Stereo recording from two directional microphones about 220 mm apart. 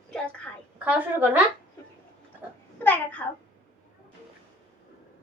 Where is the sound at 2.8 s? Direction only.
5° left (ahead or behind).